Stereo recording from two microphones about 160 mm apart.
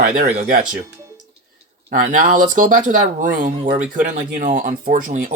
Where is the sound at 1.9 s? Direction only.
55° right (ahead or behind).